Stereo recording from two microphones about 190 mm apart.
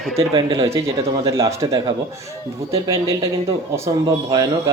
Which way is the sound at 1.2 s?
15° right (ahead or behind).